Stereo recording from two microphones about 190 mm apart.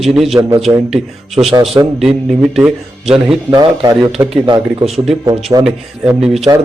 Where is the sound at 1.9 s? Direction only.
Centre (ahead or behind).